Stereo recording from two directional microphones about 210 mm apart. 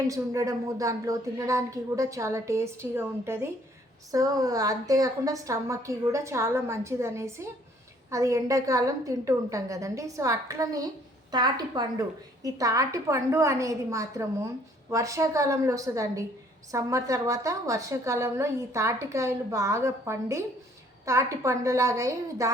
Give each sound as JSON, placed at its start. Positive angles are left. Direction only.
{"t": 0.1, "sound": "a woman's voice", "side_deg": -15}